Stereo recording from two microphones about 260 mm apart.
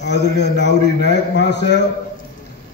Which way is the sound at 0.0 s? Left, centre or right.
Left.